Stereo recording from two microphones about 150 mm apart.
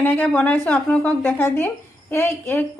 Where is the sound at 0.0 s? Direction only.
10° left (ahead or behind).